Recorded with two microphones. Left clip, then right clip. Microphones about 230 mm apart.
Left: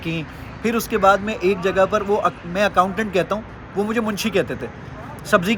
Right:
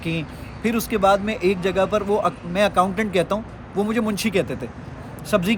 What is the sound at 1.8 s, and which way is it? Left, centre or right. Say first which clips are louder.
A man's voice: left 2 dB; centre.